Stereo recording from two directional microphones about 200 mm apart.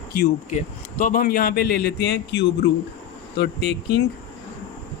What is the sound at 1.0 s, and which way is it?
A man's voice, 45° left (ahead or behind).